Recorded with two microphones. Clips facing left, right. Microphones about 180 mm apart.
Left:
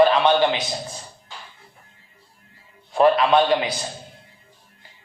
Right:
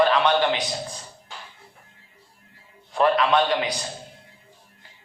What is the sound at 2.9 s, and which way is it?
Speech, 25° left (ahead or behind).